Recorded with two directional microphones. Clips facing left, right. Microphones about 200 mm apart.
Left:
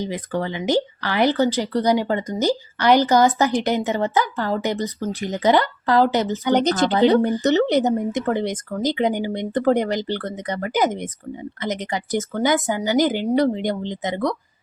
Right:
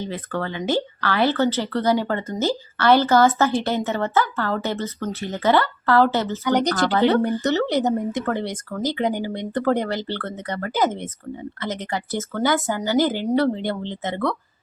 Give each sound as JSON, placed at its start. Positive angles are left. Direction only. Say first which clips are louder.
{"t": 0.0, "sound": "speech", "louder": "left 2 dB", "side_deg": 15}